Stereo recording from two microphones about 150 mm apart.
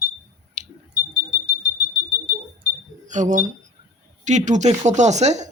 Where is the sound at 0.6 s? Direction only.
55° right (ahead or behind).